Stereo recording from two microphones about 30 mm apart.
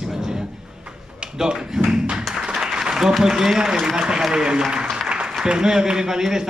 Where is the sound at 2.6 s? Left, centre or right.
Centre.